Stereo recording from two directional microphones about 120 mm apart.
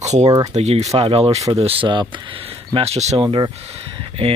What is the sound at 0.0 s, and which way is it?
Speech, 70° right (ahead or behind).